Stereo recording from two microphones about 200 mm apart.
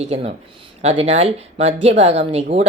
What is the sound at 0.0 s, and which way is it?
Speech, 30° right (ahead or behind).